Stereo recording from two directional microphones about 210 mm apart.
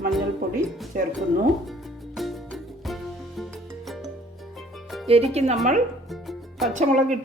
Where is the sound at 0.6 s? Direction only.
10° right (ahead or behind).